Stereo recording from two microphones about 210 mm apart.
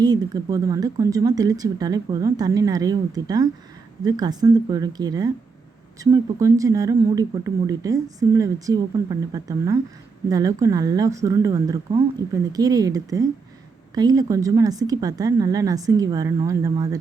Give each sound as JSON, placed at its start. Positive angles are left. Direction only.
{"t": 0.0, "sound": "speech", "side_deg": -20}